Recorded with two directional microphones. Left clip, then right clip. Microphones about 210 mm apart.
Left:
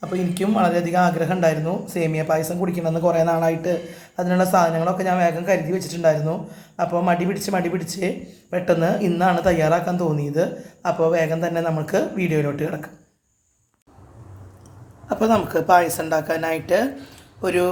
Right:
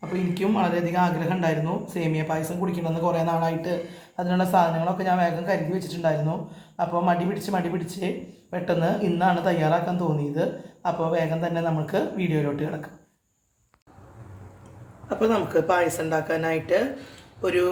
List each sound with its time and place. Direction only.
0.1 s speech: 45° left (ahead or behind)
15.2 s speech: 50° left (ahead or behind)